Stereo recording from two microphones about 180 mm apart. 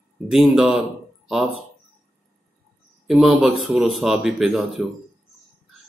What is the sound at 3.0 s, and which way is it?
Speech, centre (ahead or behind).